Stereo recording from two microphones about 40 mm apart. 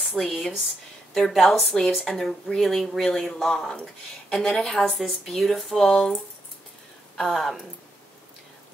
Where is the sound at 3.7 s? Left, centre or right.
Centre.